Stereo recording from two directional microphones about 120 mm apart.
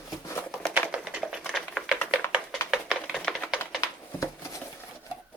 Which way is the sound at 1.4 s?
5° left (ahead or behind).